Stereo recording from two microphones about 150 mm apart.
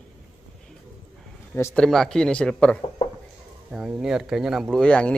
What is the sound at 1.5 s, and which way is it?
Speech, 15° left (ahead or behind).